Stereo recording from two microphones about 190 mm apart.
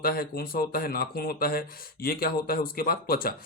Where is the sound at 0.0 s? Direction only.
50° left (ahead or behind).